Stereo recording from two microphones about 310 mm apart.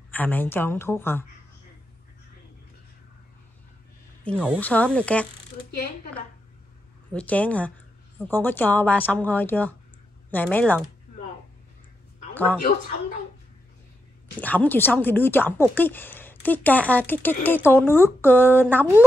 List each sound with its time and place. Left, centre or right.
0.1 s speech: centre
4.2 s speech: centre
5.7 s speech: left
7.1 s speech: centre
14.4 s speech: centre